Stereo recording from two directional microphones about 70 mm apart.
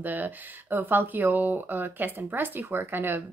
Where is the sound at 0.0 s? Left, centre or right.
Right.